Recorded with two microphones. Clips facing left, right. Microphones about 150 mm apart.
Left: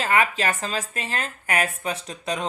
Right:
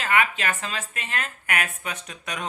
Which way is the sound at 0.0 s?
35° left (ahead or behind).